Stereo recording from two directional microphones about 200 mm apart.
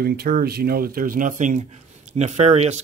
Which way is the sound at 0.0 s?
50° right (ahead or behind).